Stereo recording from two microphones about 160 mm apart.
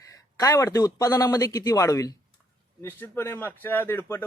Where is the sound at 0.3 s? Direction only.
20° left (ahead or behind).